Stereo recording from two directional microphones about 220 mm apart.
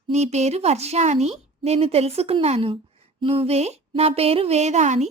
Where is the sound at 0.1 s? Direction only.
30° right (ahead or behind).